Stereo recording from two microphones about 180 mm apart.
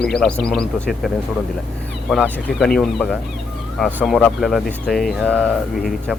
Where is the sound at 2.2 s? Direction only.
Centre (ahead or behind).